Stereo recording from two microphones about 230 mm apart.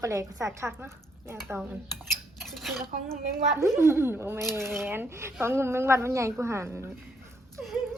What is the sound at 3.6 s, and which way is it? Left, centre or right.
Speech, centre.